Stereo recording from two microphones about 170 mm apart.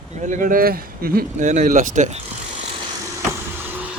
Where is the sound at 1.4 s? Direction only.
45° right (ahead or behind).